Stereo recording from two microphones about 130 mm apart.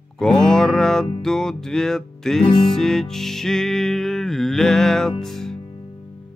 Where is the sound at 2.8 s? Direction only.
5° left (ahead or behind).